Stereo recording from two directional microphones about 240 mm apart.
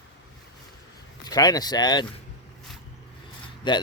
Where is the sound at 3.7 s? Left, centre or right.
Centre.